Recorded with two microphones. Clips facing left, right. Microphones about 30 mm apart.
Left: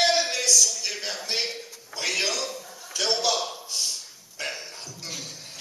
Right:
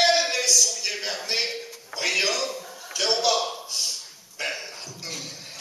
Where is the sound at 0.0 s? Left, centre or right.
Centre.